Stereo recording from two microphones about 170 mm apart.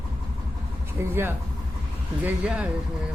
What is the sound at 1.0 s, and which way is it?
A man's voice, 15° right (ahead or behind).